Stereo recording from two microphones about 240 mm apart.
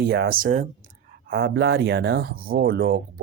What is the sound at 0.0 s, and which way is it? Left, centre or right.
Speech, right.